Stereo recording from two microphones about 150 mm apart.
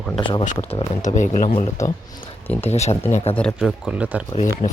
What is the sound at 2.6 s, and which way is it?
Speech, 45° left (ahead or behind).